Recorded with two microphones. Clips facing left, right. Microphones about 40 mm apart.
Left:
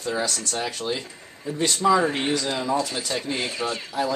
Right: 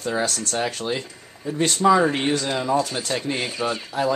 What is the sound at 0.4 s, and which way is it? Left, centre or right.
Speech, centre.